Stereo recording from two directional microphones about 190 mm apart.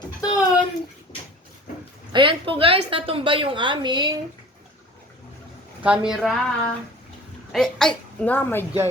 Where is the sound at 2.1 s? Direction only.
25° right (ahead or behind).